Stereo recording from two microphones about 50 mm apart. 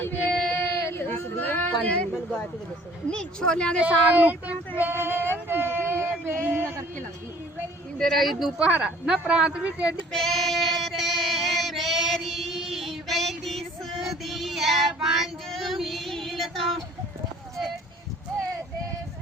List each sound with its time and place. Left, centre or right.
0.0 s child singing: left
1.4 s a sound: left
3.1 s speech: centre
3.8 s speech: right
4.8 s a sound: right
6.4 s a man's voice: right
7.9 s speech: centre
8.5 s a man's voice: right
10.1 s female singing: centre
14.1 s child singing: centre
15.4 s female singing: centre